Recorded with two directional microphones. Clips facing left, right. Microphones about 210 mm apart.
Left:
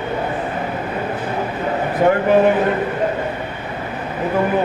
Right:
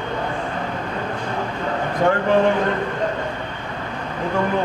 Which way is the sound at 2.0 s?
15° left (ahead or behind).